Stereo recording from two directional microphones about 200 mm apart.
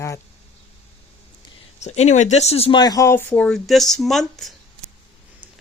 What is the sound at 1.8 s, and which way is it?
Speech, 35° left (ahead or behind).